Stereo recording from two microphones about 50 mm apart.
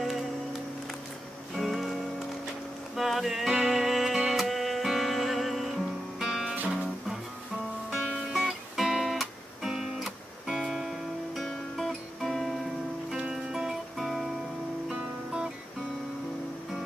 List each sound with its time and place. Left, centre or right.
0.0 s music: centre
1.6 s music: centre
8.3 s music: centre
11.4 s music: centre
13.3 s music: centre
14.9 s music: centre